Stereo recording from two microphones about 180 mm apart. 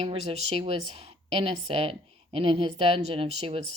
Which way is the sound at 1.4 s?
30° right (ahead or behind).